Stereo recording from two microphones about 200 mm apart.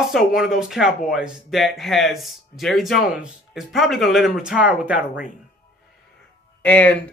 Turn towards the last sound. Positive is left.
turn(degrees=5)  # may be behind; listen again after turning